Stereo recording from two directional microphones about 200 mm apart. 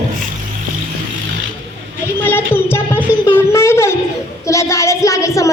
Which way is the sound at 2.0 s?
10° left (ahead or behind).